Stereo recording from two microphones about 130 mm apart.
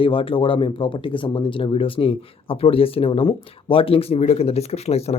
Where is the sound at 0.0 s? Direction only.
45° left (ahead or behind).